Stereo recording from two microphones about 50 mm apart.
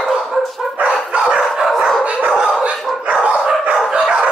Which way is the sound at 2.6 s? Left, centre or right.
Right.